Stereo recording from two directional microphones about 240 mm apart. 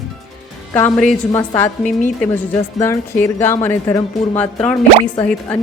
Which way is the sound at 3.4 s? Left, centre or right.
Centre.